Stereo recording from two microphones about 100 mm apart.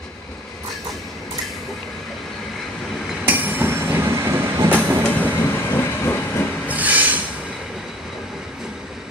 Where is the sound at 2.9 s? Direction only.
Centre (ahead or behind).